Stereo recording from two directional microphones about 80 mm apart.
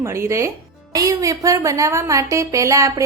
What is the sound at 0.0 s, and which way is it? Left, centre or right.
A woman's voice, right.